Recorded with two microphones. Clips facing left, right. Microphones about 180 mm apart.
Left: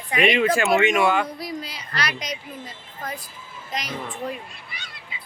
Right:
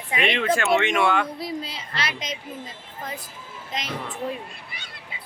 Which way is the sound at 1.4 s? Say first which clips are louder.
Right 1 dB; 25° right (ahead or behind).